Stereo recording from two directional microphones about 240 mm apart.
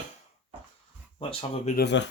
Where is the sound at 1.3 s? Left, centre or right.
Left.